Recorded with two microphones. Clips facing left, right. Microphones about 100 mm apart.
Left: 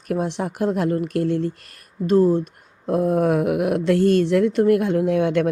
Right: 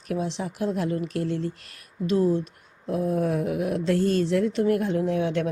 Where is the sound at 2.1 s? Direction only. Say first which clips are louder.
Left 6 dB; 45° left (ahead or behind).